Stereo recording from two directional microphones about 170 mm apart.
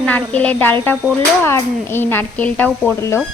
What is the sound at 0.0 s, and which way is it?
A woman's voice, 5° left (ahead or behind).